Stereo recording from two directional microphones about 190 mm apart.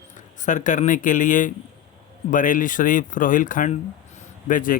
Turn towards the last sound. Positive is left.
turn(degrees=45)  # may be behind; listen again after turning